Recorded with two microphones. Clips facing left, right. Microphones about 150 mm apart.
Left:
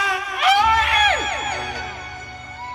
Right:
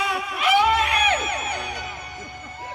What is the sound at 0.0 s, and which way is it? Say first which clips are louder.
Music: left 3 dB; 85° left.